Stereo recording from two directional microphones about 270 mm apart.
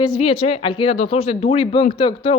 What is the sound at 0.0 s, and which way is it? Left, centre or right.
Speech, centre.